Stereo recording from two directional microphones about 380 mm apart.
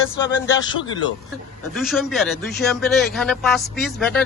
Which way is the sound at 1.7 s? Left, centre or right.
Centre.